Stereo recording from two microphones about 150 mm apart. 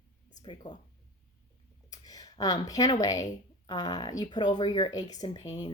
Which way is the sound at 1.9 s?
25° left (ahead or behind).